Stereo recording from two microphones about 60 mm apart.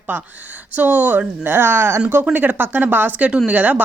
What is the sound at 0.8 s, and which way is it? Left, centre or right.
Speech, right.